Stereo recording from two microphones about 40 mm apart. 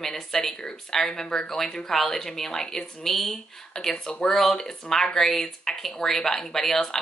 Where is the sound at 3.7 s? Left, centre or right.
Centre.